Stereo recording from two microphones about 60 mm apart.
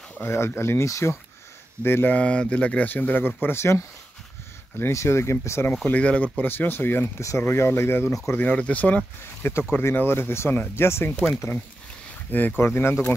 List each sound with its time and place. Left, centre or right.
0.2 s speech: left
0.8 s speech: left
1.8 s speech: left
2.1 s speech: left
3.4 s speech: left
5.9 s speech: left
6.4 s speech: left
7.2 s speech: left
8.5 s speech: left
9.2 s speech: left
12.3 s speech: left